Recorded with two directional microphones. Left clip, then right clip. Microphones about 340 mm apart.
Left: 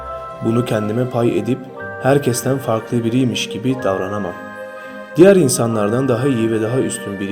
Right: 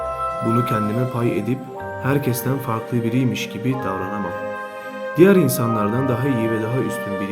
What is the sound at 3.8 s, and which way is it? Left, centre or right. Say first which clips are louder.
Speech: left 5 dB; centre.